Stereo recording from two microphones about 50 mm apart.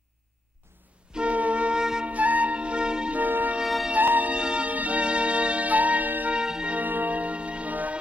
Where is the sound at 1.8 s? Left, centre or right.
Centre.